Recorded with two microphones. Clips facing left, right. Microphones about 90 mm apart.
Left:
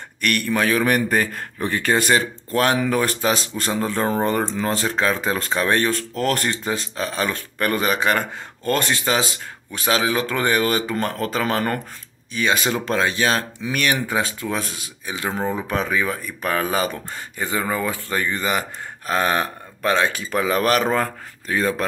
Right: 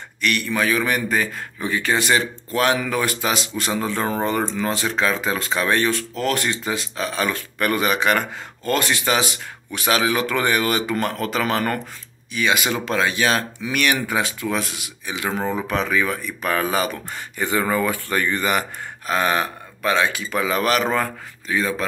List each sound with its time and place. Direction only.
0.2 s a man's voice: 50° left (ahead or behind)